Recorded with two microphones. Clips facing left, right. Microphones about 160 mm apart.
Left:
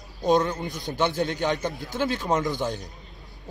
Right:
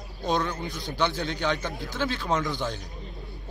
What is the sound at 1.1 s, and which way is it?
Speech, 50° left (ahead or behind).